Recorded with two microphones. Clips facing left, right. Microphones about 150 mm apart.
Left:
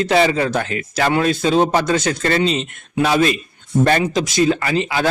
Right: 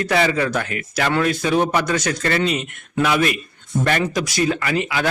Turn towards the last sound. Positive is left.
turn(degrees=30)  # may be behind; listen again after turning